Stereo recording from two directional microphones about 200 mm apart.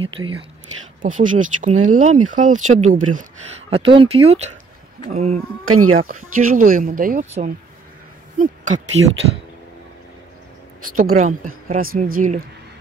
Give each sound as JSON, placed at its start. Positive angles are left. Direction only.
{"t": 0.0, "sound": "speech", "side_deg": -25}
{"t": 1.0, "sound": "speech", "side_deg": -40}
{"t": 3.7, "sound": "speech", "side_deg": -25}
{"t": 5.7, "sound": "speech", "side_deg": -90}
{"t": 6.5, "sound": "speech", "side_deg": -40}
{"t": 11.0, "sound": "speech", "side_deg": -40}